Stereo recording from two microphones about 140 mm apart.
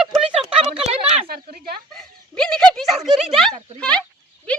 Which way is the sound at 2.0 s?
5° left (ahead or behind).